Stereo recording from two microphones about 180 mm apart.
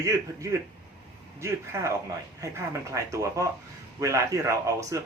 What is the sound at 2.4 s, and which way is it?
Speech, 15° right (ahead or behind).